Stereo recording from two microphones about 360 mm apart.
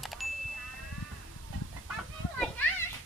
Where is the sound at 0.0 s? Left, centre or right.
Centre.